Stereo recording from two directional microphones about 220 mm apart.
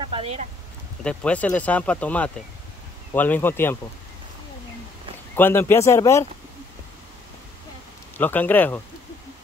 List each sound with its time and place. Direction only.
0.0 s speech: 25° right (ahead or behind)
1.0 s speech: 5° left (ahead or behind)
5.3 s speech: 10° left (ahead or behind)
8.2 s speech: 10° left (ahead or behind)